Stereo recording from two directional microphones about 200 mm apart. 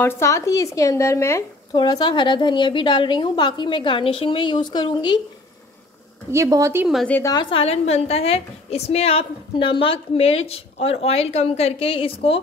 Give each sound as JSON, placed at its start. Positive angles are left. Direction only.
{"t": 0.0, "sound": "speech", "side_deg": 15}
{"t": 6.3, "sound": "speech", "side_deg": -15}
{"t": 6.9, "sound": "a woman's voice", "side_deg": 5}
{"t": 7.3, "sound": "a woman's voice", "side_deg": 25}